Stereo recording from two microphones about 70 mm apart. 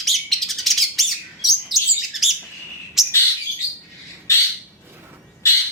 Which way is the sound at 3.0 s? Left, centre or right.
Centre.